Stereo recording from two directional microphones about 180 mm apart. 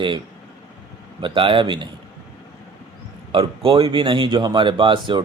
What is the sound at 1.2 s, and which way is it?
Speech, 30° right (ahead or behind).